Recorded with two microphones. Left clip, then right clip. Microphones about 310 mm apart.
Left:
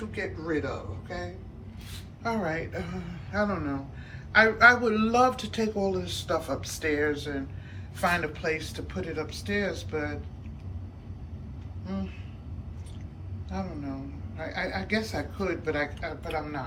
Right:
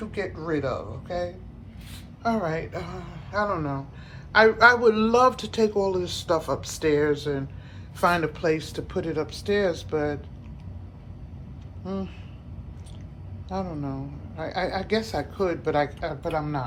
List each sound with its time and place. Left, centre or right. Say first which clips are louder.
0.1 s speech: right 3 dB; centre
11.9 s speech: right 5 dB; centre
13.5 s speech: right 5 dB; centre